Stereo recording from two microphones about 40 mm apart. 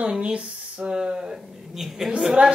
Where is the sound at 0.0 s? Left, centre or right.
Right.